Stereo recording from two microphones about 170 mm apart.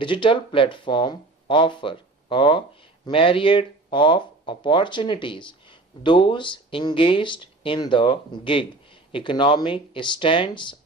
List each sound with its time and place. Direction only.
0.0 s speech: 30° left (ahead or behind)